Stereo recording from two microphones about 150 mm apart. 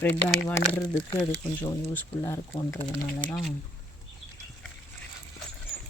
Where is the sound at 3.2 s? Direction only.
Centre (ahead or behind).